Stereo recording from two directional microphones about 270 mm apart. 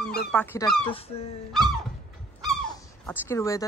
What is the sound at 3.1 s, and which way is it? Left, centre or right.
Speech, centre.